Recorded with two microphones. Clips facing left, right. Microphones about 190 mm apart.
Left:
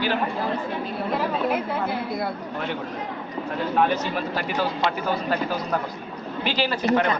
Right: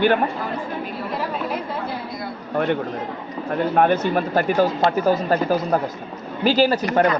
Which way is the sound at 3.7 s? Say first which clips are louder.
Right 4 dB; 55° right (ahead or behind).